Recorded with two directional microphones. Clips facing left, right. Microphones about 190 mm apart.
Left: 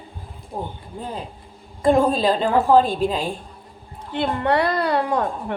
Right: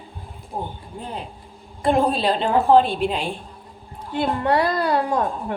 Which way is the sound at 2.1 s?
40° left (ahead or behind).